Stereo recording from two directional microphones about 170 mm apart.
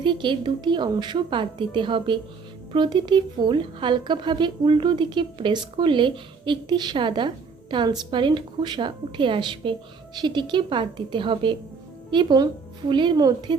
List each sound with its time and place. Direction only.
0.0 s a woman's voice: 30° right (ahead or behind)